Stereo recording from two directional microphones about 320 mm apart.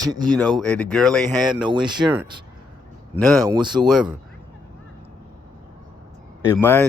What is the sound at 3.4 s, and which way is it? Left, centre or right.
Speech, centre.